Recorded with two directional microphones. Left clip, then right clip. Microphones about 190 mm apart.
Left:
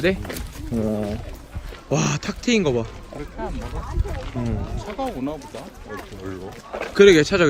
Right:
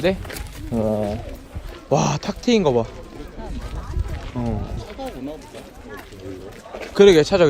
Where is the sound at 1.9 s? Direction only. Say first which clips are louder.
Right 4 dB; 10° right (ahead or behind).